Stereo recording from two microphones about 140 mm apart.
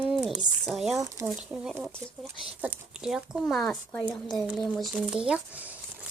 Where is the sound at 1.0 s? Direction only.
20° right (ahead or behind).